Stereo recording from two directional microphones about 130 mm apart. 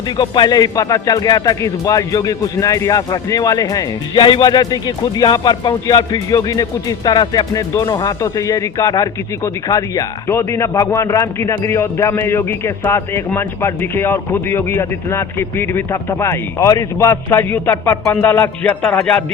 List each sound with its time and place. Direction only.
0.2 s speech: 30° left (ahead or behind); by 19.2 s 15° left (ahead or behind)